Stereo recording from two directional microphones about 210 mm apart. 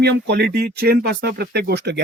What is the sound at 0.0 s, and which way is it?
Speech, 50° right (ahead or behind).